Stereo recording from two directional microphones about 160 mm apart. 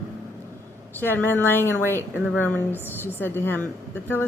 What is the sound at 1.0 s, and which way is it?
A woman's voice, 10° left (ahead or behind).